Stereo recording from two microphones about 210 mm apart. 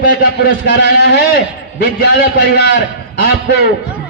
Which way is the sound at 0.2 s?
50° left (ahead or behind).